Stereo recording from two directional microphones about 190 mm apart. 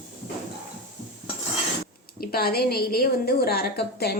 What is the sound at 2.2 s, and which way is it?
A woman's voice, 55° left (ahead or behind).